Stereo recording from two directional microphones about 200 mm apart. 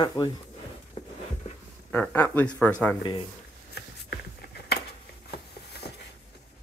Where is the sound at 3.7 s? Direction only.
55° left (ahead or behind).